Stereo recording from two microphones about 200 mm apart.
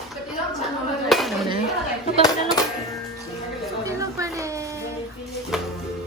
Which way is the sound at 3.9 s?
15° right (ahead or behind).